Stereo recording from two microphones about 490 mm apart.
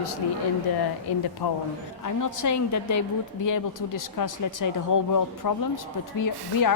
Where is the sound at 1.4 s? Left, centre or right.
Left.